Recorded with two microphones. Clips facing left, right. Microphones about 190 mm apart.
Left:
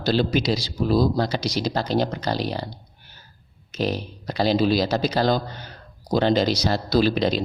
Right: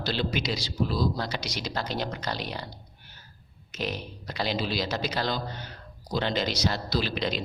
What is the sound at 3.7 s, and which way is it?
Speech, 35° left (ahead or behind).